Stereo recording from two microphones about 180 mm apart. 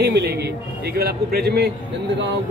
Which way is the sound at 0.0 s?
65° right (ahead or behind).